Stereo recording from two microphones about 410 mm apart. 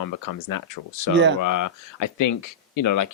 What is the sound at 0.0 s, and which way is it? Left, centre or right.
Speech, left.